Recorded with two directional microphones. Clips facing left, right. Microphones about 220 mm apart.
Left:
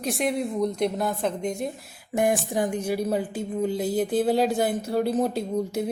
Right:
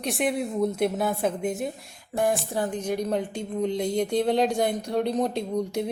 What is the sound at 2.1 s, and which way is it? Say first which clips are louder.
A woman's voice: left 2 dB; 15° left (ahead or behind).